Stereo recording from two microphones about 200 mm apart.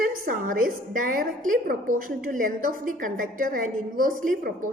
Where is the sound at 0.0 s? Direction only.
45° right (ahead or behind).